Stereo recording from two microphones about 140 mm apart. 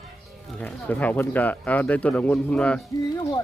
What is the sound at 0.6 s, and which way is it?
Speech, 10° left (ahead or behind).